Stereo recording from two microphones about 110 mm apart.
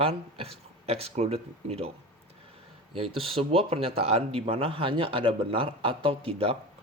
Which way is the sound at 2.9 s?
60° right (ahead or behind).